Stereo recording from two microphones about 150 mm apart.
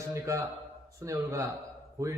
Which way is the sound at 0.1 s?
20° right (ahead or behind).